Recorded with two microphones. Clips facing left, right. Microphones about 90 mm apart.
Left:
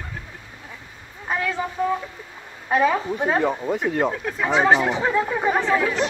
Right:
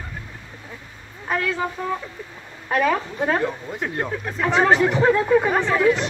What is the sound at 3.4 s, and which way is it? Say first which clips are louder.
Speech: left 4 dB; 75° left (ahead or behind).